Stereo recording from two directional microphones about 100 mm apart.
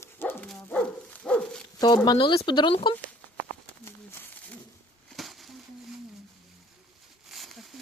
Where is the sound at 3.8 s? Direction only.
25° left (ahead or behind).